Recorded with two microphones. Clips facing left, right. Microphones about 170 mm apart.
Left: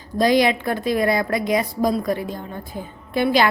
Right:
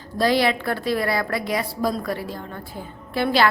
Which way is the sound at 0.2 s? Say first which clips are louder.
Left 3 dB; 20° left (ahead or behind).